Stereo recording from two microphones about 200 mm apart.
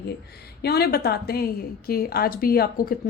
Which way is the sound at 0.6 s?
50° left (ahead or behind).